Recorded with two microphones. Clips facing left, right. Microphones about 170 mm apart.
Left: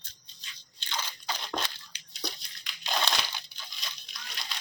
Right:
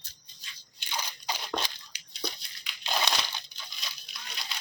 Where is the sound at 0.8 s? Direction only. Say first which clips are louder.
Even; 10° right (ahead or behind).